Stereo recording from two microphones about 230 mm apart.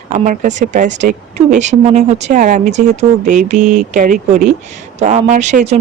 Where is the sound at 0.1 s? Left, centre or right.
Right.